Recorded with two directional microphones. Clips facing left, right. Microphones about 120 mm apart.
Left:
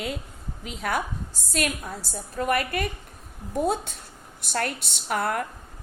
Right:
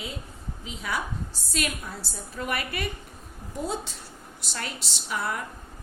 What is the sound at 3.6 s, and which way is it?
A woman's voice, 60° left (ahead or behind).